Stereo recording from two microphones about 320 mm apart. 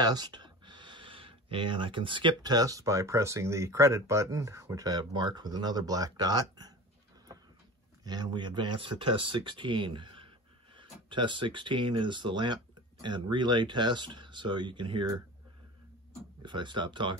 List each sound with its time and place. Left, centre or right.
0.0 s speech: centre
8.0 s speech: centre
16.2 s speech: centre